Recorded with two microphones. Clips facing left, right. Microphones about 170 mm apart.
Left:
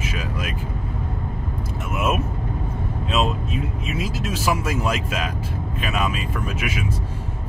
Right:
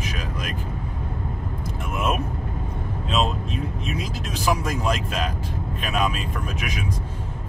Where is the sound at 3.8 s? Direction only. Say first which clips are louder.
Left 3 dB; 5° left (ahead or behind).